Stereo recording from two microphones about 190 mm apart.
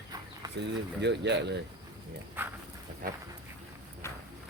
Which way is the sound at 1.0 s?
65° right (ahead or behind).